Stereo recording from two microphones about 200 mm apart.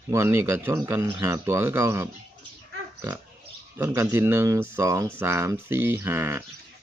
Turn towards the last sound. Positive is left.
turn(degrees=-10)  # may be behind; listen again after turning